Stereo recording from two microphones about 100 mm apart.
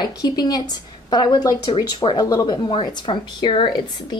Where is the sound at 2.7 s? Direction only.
60° left (ahead or behind).